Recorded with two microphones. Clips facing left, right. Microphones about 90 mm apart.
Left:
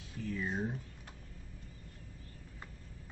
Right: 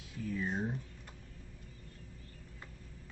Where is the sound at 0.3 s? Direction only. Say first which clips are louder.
Right 1 dB; centre (ahead or behind).